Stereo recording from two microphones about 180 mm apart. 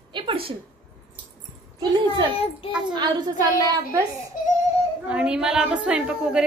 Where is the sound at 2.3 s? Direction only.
35° left (ahead or behind).